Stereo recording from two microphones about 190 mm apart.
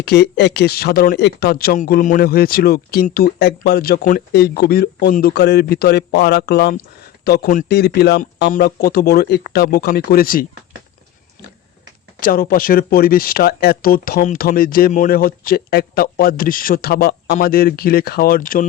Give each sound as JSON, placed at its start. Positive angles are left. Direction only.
{"t": 0.0, "sound": "speech", "side_deg": 60}
{"t": 8.4, "sound": "speech", "side_deg": 50}
{"t": 12.2, "sound": "speech", "side_deg": 50}